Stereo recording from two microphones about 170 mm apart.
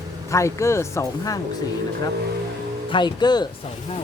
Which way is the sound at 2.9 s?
25° left (ahead or behind).